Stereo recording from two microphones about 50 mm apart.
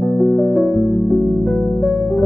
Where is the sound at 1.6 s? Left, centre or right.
Centre.